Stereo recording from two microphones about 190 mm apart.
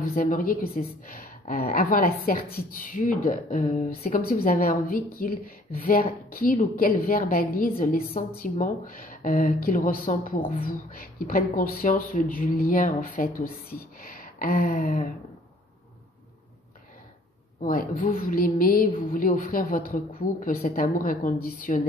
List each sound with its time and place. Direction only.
0.0 s a woman's voice: 50° left (ahead or behind)
14.1 s a sound: 50° left (ahead or behind)
17.6 s a woman's voice: 45° left (ahead or behind)